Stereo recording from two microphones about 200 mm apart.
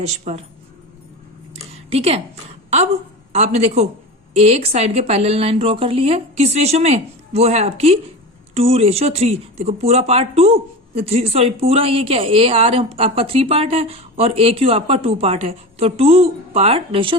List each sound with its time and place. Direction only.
0.3 s a woman's voice: 40° right (ahead or behind)
1.5 s a sound: 30° right (ahead or behind)
2.6 s a woman's voice: 35° right (ahead or behind)